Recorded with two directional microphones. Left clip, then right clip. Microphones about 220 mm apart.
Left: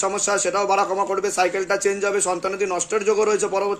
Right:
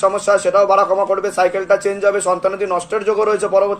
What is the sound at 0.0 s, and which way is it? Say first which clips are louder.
Speech: right 7 dB; 40° left (ahead or behind).